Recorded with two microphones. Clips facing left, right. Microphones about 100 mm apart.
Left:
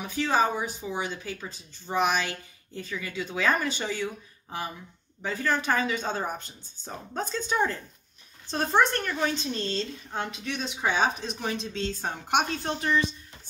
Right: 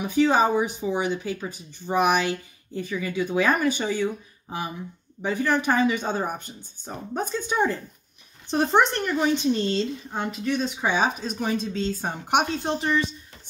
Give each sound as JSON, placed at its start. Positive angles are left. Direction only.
{"t": 0.0, "sound": "speech", "side_deg": -15}
{"t": 10.1, "sound": "speech", "side_deg": -5}
{"t": 12.6, "sound": "speech", "side_deg": -30}